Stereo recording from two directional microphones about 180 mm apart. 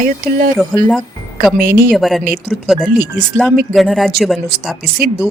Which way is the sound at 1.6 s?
50° right (ahead or behind).